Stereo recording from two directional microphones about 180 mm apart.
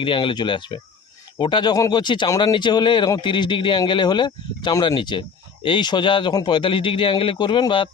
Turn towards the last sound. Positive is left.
turn(degrees=25)  # may be behind; listen again after turning